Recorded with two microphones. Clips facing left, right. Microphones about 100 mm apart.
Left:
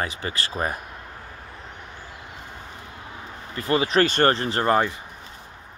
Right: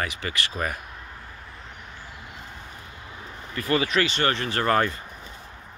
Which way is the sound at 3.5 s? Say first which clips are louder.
Left 3 dB; 30° left (ahead or behind).